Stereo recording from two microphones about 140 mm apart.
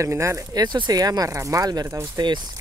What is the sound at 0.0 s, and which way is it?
Speech, 20° right (ahead or behind).